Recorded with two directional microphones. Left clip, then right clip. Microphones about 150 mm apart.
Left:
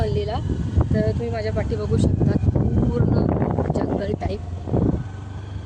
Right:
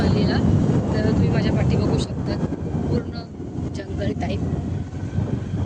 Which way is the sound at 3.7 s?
30° left (ahead or behind).